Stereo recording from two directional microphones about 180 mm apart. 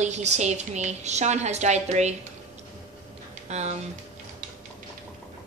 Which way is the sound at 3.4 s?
40° right (ahead or behind).